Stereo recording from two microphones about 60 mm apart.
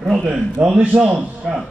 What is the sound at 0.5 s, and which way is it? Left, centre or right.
Speech, right.